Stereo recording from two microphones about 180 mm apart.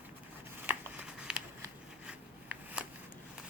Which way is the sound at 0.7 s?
5° right (ahead or behind).